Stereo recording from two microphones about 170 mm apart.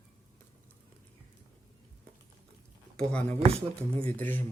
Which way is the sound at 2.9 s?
5° left (ahead or behind).